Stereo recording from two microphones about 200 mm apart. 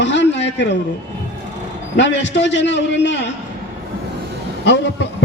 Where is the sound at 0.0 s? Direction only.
65° left (ahead or behind).